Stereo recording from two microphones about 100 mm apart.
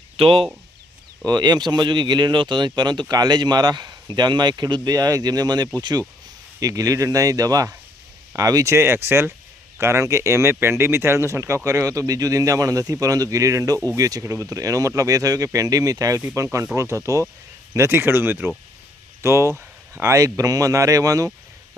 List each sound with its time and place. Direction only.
0.2 s speech: 65° right (ahead or behind)
1.2 s speech: 40° right (ahead or behind)